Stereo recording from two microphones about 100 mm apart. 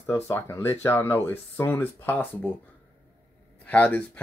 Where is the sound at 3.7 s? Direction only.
15° left (ahead or behind).